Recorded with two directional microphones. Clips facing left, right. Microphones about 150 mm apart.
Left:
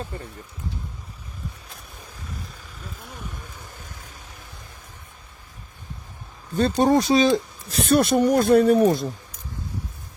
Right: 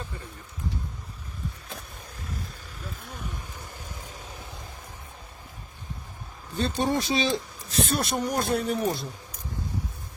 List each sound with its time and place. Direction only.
6.6 s speech: 45° left (ahead or behind)
7.9 s speech: 60° left (ahead or behind)
8.8 s speech: 45° left (ahead or behind)